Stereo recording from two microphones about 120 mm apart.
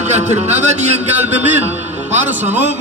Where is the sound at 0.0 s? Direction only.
70° right (ahead or behind).